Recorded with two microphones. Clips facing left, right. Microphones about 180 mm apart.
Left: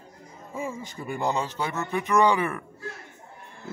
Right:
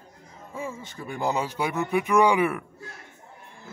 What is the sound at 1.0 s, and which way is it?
A man's voice, centre (ahead or behind).